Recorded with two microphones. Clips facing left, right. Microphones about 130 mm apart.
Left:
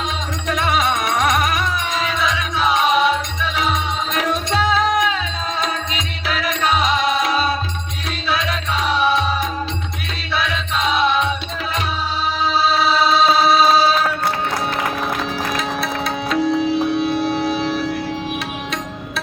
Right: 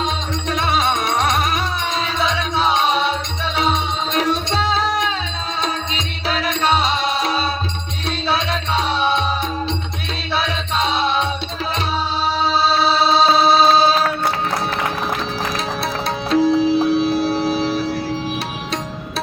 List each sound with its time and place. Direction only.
0.0 s music: 30° right (ahead or behind)
10.3 s music: 30° right (ahead or behind)
12.5 s music: 30° right (ahead or behind)
15.5 s music: 30° right (ahead or behind)